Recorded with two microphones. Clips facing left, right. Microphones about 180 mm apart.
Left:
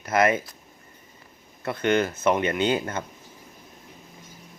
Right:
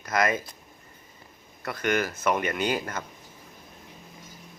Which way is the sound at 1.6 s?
25° left (ahead or behind).